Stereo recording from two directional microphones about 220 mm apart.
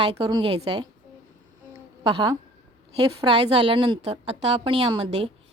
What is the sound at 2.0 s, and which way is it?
A woman's voice, 25° right (ahead or behind).